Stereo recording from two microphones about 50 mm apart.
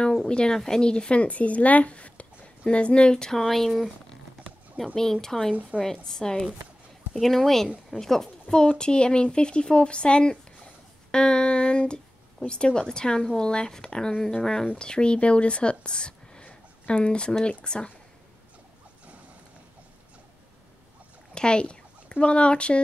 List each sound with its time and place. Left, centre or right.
0.2 s a woman's voice: centre
5.5 s a woman's voice: right
5.8 s speech: centre
21.4 s speech: centre